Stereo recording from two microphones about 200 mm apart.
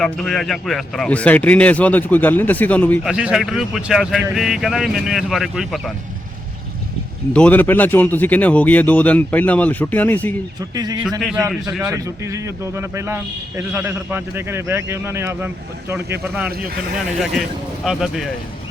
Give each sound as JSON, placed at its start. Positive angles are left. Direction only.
{"t": 0.0, "sound": "a man's voice", "side_deg": 5}
{"t": 3.0, "sound": "speech", "side_deg": -5}
{"t": 7.3, "sound": "a man's voice", "side_deg": 5}
{"t": 10.6, "sound": "a man's voice", "side_deg": -20}
{"t": 11.2, "sound": "speech", "side_deg": 0}
{"t": 11.9, "sound": "a man's voice", "side_deg": -15}
{"t": 16.2, "sound": "speech", "side_deg": 0}
{"t": 16.5, "sound": "speech", "side_deg": -45}
{"t": 17.8, "sound": "speech", "side_deg": 0}